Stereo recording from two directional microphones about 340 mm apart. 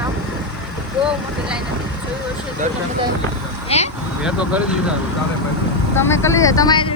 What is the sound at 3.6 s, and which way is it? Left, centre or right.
Vehicle, centre.